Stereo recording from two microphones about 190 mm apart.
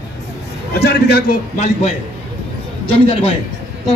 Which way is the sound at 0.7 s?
60° left (ahead or behind).